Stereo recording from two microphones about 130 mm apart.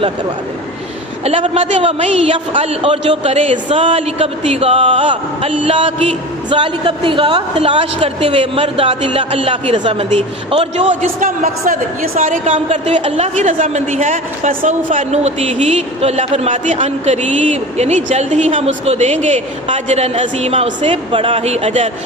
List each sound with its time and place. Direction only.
1.2 s a man's voice: 45° right (ahead or behind)
11.2 s a woman's voice: 90° right
12.6 s a woman's voice: 55° right (ahead or behind)